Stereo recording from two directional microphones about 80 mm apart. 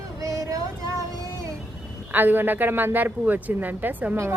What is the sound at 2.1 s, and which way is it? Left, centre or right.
A woman's voice, right.